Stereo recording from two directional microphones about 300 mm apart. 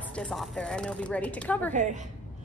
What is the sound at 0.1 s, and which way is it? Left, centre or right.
Speech, centre.